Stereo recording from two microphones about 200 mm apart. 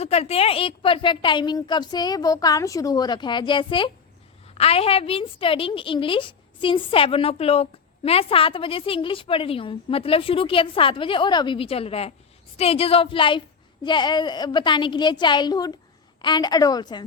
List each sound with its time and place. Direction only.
0.0 s a woman's voice: 30° left (ahead or behind)